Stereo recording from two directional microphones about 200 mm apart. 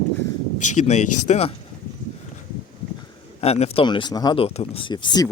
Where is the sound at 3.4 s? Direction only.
30° left (ahead or behind).